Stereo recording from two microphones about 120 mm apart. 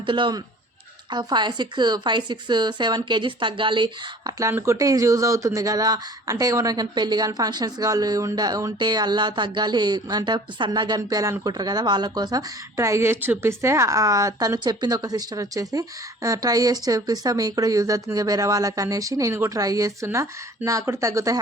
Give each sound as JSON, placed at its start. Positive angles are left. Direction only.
{"t": 0.0, "sound": "speech", "side_deg": -45}